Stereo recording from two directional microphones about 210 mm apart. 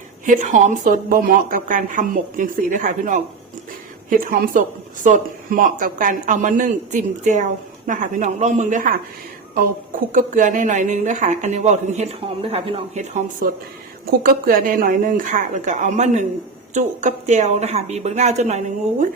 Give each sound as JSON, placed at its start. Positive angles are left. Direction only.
{"t": 0.3, "sound": "speech", "side_deg": -35}
{"t": 10.1, "sound": "speech", "side_deg": -40}